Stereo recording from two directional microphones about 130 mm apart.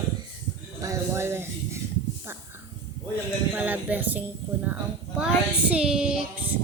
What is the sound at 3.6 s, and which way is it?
Speech, 10° right (ahead or behind).